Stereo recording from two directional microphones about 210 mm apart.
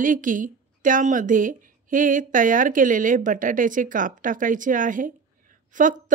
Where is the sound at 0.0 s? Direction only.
40° right (ahead or behind).